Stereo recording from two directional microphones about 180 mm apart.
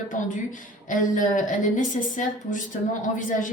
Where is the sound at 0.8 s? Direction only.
45° left (ahead or behind).